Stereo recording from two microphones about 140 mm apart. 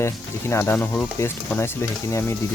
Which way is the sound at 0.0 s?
20° left (ahead or behind).